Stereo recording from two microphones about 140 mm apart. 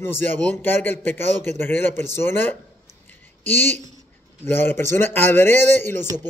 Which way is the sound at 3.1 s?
15° left (ahead or behind).